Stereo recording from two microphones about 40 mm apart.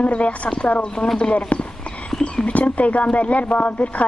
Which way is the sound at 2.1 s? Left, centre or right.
Centre.